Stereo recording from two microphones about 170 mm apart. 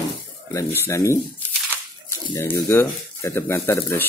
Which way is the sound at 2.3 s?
15° left (ahead or behind).